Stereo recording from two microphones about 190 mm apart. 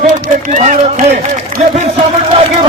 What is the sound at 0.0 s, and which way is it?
Run, 45° right (ahead or behind).